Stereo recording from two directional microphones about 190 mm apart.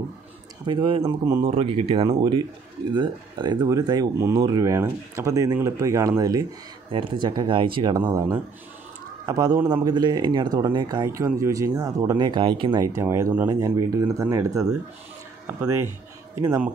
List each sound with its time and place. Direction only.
0.7 s a man's voice: 25° right (ahead or behind)
1.5 s a man's voice: 30° right (ahead or behind)
16.3 s a man's voice: 20° right (ahead or behind)